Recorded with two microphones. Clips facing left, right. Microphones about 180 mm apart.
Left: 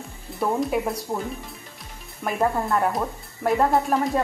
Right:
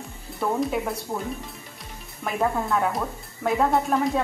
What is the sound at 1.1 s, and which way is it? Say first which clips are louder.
Speech: left 2 dB; 20° left (ahead or behind).